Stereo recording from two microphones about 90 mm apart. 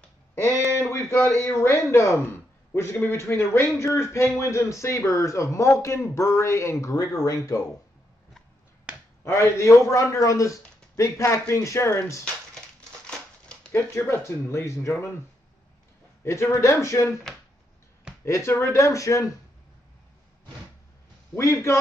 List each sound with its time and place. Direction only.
0.5 s a sound: 35° right (ahead or behind)
0.7 s a man's voice: 30° left (ahead or behind)
9.2 s a man's voice: 30° left (ahead or behind)
13.0 s crumpling: 10° left (ahead or behind)
13.7 s a man's voice: 30° left (ahead or behind)
16.3 s a man's voice: 30° left (ahead or behind)
17.1 s speech: centre (ahead or behind)
18.2 s a man's voice: 30° left (ahead or behind)
21.4 s a man's voice: 35° left (ahead or behind)